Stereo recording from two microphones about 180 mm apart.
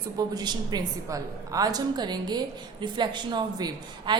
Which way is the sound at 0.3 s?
20° right (ahead or behind).